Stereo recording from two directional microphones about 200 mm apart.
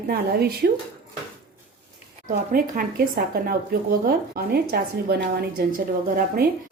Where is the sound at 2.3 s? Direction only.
45° right (ahead or behind).